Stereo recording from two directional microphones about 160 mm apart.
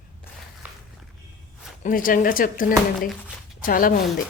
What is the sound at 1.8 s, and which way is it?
Speech, 60° left (ahead or behind).